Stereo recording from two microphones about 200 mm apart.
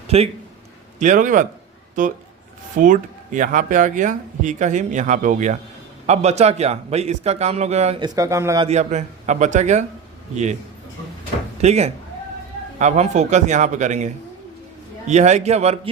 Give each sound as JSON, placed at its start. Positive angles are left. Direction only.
{"t": 0.1, "sound": "speech", "side_deg": -30}
{"t": 8.6, "sound": "speech", "side_deg": -35}
{"t": 11.6, "sound": "speech", "side_deg": -35}